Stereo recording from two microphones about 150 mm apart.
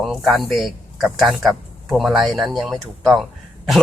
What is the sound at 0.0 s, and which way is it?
Speech, centre (ahead or behind).